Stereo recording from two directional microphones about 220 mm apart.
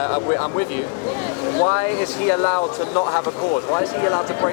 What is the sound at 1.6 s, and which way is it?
Speech, 20° left (ahead or behind).